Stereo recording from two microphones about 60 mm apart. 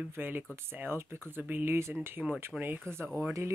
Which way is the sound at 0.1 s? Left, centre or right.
Right.